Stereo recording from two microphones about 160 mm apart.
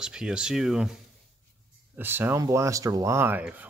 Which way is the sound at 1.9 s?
15° right (ahead or behind).